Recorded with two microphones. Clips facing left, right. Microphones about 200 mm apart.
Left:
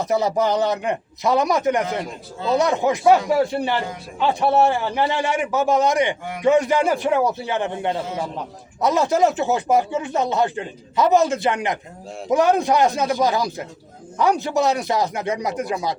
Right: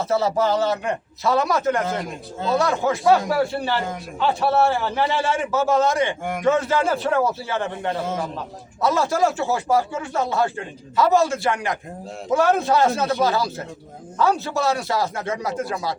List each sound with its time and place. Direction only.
0.0 s a man's voice: 15° left (ahead or behind)